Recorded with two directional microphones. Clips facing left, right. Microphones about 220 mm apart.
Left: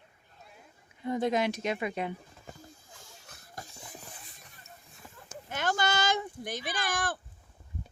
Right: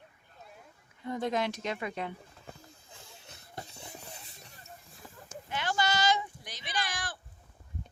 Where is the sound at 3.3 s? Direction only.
25° right (ahead or behind).